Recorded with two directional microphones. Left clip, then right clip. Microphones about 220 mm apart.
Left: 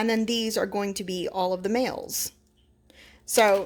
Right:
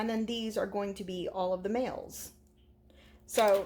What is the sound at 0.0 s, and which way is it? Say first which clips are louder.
Speech: left 9 dB; 40° left (ahead or behind).